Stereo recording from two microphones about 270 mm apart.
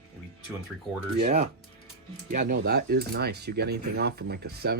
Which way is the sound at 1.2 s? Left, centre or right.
Right.